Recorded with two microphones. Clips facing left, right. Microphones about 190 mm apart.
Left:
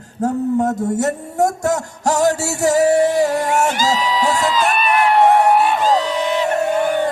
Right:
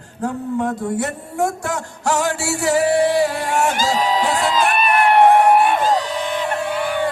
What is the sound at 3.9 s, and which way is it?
Music, 50° right (ahead or behind).